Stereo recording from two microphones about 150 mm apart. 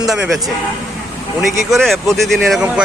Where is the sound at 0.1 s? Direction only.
Centre (ahead or behind).